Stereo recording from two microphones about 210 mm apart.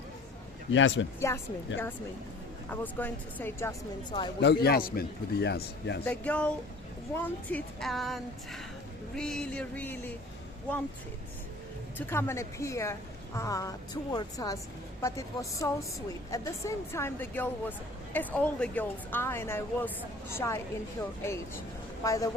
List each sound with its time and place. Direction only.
0.7 s speech: 65° left (ahead or behind)
2.6 s a woman's voice: 10° left (ahead or behind)
4.4 s a man's voice: 50° left (ahead or behind)
6.1 s speech: 5° left (ahead or behind)
11.9 s a woman's voice: 10° left (ahead or behind)
22.0 s a woman's voice: 15° left (ahead or behind)